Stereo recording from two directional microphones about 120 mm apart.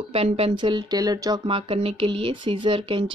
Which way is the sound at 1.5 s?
50° right (ahead or behind).